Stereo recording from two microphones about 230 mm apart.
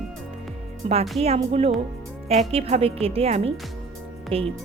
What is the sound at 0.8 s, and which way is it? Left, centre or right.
Speech, right.